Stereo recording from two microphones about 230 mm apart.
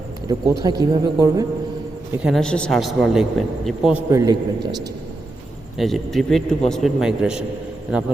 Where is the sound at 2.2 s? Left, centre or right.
Centre.